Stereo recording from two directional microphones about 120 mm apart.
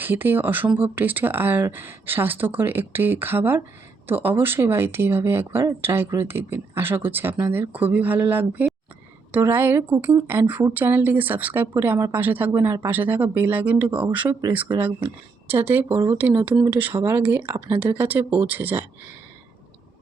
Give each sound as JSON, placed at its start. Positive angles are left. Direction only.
{"t": 0.0, "sound": "speech", "side_deg": -15}